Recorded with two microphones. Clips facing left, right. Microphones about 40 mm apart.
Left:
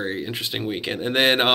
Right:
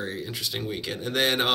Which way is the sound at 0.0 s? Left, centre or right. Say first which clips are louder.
Left 5 dB; left.